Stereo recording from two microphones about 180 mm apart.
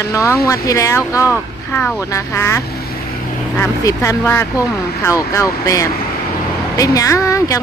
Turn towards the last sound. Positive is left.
turn(degrees=15)  # may be behind; listen again after turning